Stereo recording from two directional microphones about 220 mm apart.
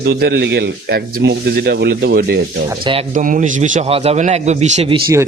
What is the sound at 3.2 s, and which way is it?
A man's voice, 35° right (ahead or behind).